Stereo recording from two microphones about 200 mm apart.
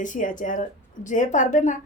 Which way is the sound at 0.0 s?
40° left (ahead or behind).